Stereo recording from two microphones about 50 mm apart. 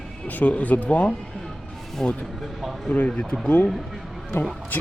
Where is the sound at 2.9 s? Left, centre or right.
Left.